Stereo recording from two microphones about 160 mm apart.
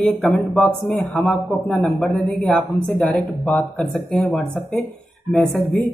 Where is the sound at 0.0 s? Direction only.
5° left (ahead or behind).